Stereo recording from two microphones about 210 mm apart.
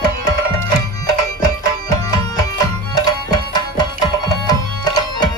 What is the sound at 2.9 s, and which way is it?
Tabla, 20° left (ahead or behind).